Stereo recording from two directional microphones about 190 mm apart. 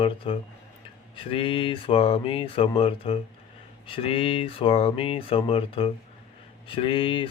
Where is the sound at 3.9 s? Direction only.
30° left (ahead or behind).